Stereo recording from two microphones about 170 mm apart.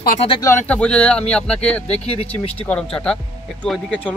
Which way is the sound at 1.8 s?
35° left (ahead or behind).